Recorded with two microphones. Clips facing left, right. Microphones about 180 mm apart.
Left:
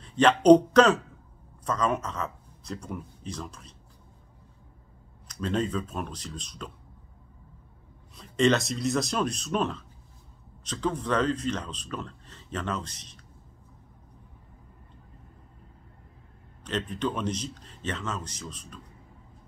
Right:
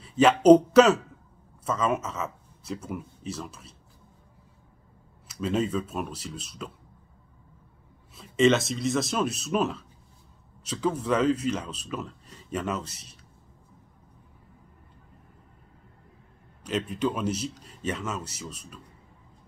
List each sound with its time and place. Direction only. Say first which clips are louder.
0.0 s speech: right 2 dB; 5° right (ahead or behind)
5.3 s speech: right 2 dB; 5° right (ahead or behind)
8.1 s speech: right 2 dB; 5° right (ahead or behind)
16.6 s speech: right 2 dB; 10° right (ahead or behind)